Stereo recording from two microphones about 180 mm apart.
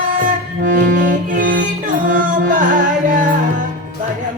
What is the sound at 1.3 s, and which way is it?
Music, 50° right (ahead or behind).